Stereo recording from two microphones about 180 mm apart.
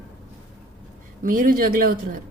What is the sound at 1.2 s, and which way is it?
Speech, 50° right (ahead or behind).